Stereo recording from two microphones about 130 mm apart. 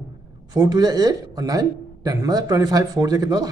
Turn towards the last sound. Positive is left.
turn(degrees=-30)  # may be behind; listen again after turning